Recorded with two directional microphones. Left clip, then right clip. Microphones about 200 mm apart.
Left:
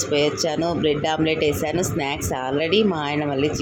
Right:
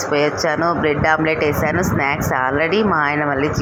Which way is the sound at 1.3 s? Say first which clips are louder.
Right 4 dB; 25° right (ahead or behind).